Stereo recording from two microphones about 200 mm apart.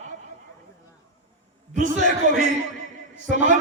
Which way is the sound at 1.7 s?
40° right (ahead or behind).